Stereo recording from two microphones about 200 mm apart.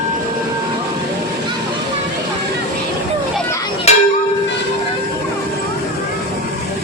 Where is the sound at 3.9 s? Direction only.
30° left (ahead or behind).